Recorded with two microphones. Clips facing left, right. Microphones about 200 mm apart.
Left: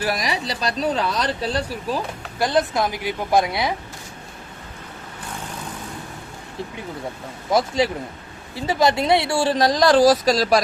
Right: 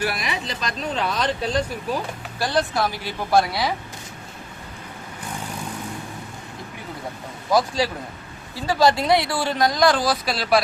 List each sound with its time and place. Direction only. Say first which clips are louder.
0.0 s speech: left 2 dB; 35° left (ahead or behind)
2.4 s speech: left 2 dB; 20° left (ahead or behind)
7.8 s speech: left 3 dB; 20° left (ahead or behind); by 10.6 s 40° left (ahead or behind)